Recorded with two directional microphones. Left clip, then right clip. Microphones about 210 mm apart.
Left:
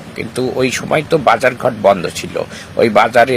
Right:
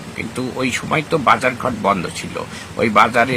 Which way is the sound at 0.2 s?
20° left (ahead or behind).